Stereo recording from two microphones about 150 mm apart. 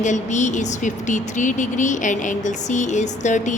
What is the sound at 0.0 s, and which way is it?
Speech, 55° left (ahead or behind).